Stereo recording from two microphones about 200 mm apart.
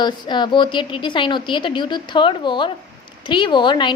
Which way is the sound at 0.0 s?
20° left (ahead or behind).